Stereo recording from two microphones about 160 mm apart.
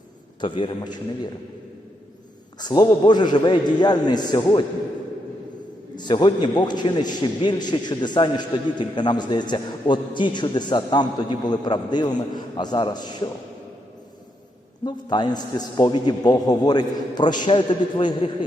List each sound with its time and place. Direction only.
0.4 s a man's voice: 30° left (ahead or behind)
2.6 s a man's voice: 25° left (ahead or behind)
6.0 s a man's voice: 30° left (ahead or behind)
14.8 s a man's voice: 25° left (ahead or behind)